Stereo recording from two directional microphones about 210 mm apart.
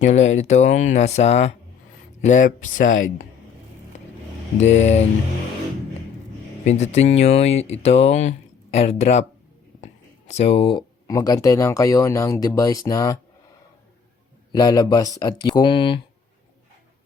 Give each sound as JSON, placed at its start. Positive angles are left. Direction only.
{"t": 0.0, "sound": "speech", "side_deg": 35}
{"t": 4.6, "sound": "speech", "side_deg": 35}
{"t": 6.7, "sound": "speech", "side_deg": 30}
{"t": 14.5, "sound": "speech", "side_deg": 15}